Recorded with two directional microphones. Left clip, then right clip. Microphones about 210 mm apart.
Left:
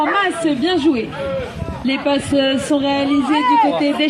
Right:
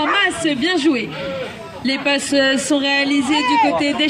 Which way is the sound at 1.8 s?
25° right (ahead or behind).